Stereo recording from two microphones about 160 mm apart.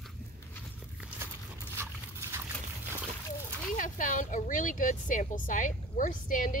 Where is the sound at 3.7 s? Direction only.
55° left (ahead or behind).